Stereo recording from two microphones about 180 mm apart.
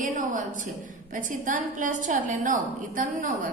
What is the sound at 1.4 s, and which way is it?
A woman's voice, 45° right (ahead or behind).